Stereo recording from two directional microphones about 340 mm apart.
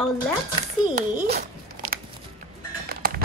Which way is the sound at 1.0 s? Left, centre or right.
Right.